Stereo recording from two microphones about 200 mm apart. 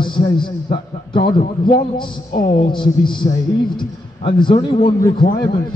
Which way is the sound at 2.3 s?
45° left (ahead or behind).